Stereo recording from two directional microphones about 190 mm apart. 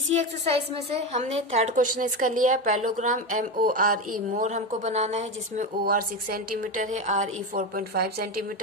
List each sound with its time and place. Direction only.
0.1 s a woman's voice: 35° right (ahead or behind)
5.8 s a woman's voice: 50° right (ahead or behind)